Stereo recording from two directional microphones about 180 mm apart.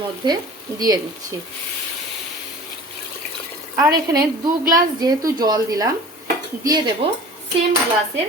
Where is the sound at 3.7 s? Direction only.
20° right (ahead or behind).